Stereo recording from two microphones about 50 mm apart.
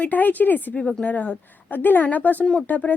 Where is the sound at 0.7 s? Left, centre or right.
Left.